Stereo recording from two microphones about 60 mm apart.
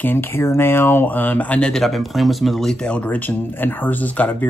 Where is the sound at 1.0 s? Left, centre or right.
Left.